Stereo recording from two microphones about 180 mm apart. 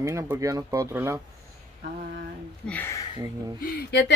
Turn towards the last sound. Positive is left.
turn(degrees=70)  # may be behind; listen again after turning